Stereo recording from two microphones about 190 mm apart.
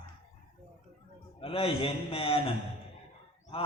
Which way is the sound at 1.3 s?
30° left (ahead or behind).